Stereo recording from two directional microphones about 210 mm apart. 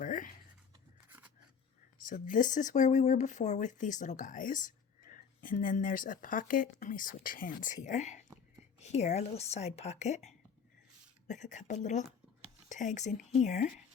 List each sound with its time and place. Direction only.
0.0 s writing: 40° left (ahead or behind)
2.0 s speech: 40° left (ahead or behind)